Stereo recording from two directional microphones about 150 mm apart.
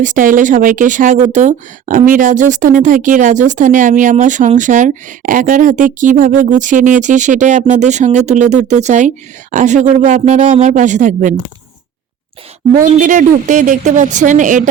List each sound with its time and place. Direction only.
0.0 s speech: 60° right (ahead or behind)
12.8 s speech: 60° right (ahead or behind)